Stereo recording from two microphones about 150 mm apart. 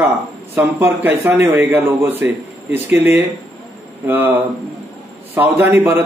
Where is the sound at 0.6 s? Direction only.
15° right (ahead or behind).